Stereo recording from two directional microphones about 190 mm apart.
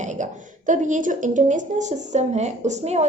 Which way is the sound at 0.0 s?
40° right (ahead or behind).